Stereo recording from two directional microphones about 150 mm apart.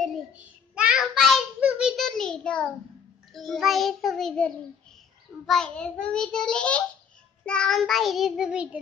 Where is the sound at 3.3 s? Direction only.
Centre (ahead or behind).